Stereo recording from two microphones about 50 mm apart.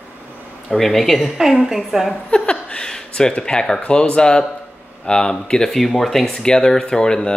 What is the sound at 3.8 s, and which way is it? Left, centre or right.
Speech, centre.